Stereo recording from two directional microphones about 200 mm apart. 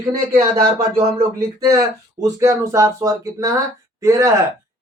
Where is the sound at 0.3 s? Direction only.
20° right (ahead or behind).